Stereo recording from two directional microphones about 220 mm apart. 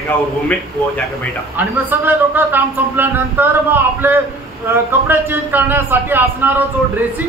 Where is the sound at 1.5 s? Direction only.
10° right (ahead or behind).